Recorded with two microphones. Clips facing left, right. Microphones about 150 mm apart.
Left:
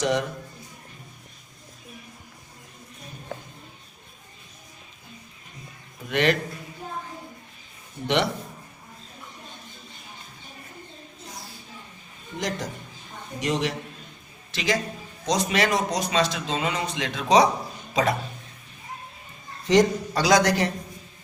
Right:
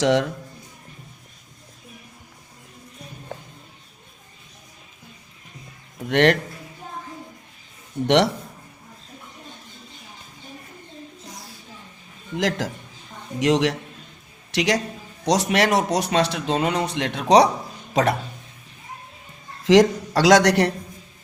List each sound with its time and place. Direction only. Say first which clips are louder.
0.0 s a man's voice: right 5 dB; 90° right
6.1 s speech: right 5 dB; 70° right (ahead or behind)
8.0 s speech: right 6 dB; 75° right (ahead or behind)
12.4 s a man's voice: right 6 dB; 90° right
14.5 s a woman's voice: right 4 dB; 75° right (ahead or behind)
19.6 s a man's voice: right 4 dB; 90° right